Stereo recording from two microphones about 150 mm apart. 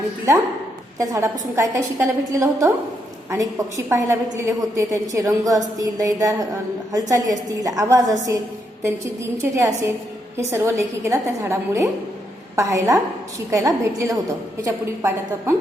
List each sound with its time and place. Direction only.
0.9 s a woman's voice: 20° right (ahead or behind)